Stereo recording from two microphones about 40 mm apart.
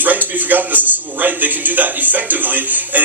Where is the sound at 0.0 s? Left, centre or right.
Right.